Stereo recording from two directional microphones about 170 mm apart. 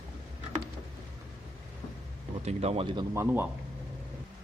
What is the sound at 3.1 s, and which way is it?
Speech, 15° right (ahead or behind).